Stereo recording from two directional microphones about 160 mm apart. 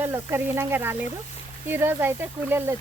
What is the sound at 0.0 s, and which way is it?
Speech, 15° right (ahead or behind).